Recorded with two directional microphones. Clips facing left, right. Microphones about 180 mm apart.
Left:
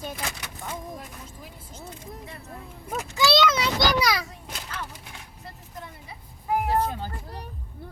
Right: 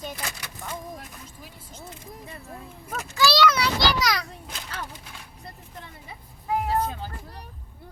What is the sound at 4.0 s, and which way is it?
Speech, 10° left (ahead or behind).